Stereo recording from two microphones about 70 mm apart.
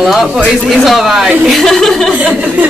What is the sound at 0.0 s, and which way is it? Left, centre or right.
A woman's voice, centre.